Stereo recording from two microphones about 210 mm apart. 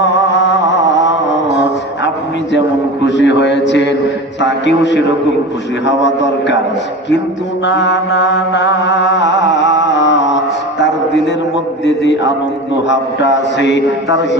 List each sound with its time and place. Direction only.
3.1 s mantra: 60° left (ahead or behind)
7.6 s mantra: 60° left (ahead or behind)
10.8 s a sound: 55° left (ahead or behind)
12.9 s mantra: 60° left (ahead or behind)